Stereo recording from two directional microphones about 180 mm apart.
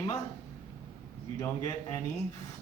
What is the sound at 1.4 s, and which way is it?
Speech, 20° left (ahead or behind).